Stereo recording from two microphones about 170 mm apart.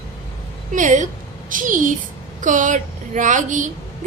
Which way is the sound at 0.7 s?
50° right (ahead or behind).